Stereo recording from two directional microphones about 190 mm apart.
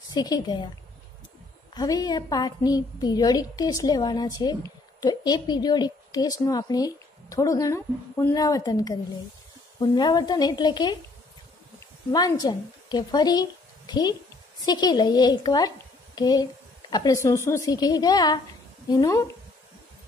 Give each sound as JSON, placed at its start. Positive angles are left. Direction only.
{"t": 0.1, "sound": "a woman's voice", "side_deg": 20}
{"t": 1.7, "sound": "a woman's voice", "side_deg": 20}
{"t": 12.1, "sound": "a woman's voice", "side_deg": 20}